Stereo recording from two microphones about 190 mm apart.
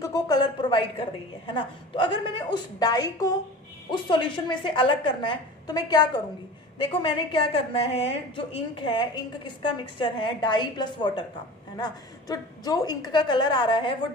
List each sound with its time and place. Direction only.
0.0 s a woman's voice: 20° left (ahead or behind)